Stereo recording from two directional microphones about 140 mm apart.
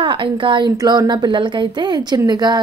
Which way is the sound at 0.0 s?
35° right (ahead or behind).